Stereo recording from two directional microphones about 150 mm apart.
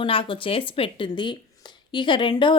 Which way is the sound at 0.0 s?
35° left (ahead or behind).